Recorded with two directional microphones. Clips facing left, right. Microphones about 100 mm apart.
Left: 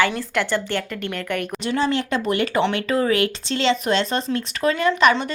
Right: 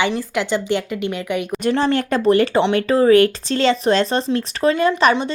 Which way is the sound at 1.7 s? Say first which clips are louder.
Right 4 dB; 45° right (ahead or behind).